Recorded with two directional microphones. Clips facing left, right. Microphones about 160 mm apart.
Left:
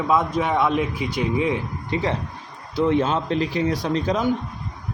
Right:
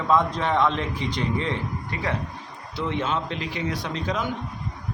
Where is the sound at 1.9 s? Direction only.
25° left (ahead or behind).